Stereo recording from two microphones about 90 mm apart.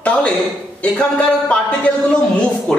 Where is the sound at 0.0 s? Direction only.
10° left (ahead or behind).